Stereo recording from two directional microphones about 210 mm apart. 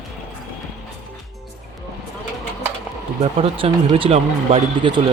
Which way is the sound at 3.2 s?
25° right (ahead or behind).